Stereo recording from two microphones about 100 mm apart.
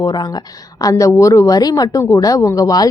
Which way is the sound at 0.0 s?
40° left (ahead or behind).